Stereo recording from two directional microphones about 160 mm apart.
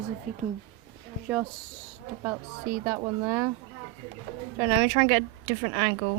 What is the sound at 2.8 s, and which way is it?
Speech, 15° right (ahead or behind).